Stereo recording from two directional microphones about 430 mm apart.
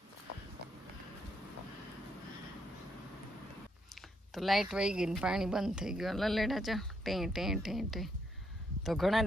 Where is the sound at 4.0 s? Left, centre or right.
Centre.